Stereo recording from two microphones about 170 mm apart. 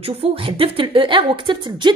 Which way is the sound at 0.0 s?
35° right (ahead or behind).